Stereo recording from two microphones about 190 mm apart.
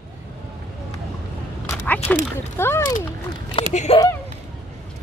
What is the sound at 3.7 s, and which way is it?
Speech, 40° left (ahead or behind).